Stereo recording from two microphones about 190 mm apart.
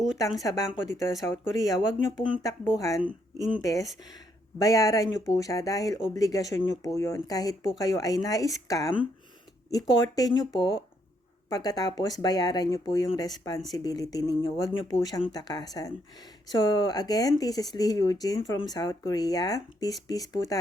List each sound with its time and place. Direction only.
0.3 s speech: 20° left (ahead or behind)